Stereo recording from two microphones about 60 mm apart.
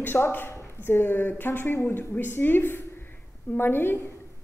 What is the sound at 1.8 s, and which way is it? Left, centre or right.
A woman's voice, left.